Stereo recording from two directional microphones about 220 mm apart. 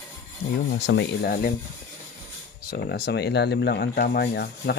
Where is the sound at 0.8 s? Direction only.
55° left (ahead or behind).